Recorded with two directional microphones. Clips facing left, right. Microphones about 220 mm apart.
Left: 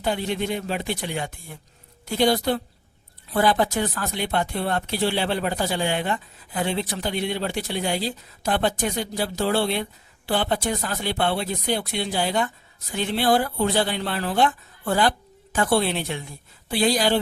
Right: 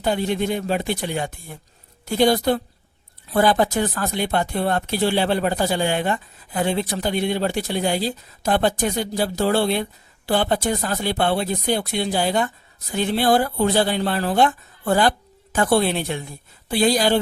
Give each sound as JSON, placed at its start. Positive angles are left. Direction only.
{"t": 0.0, "sound": "speech", "side_deg": -45}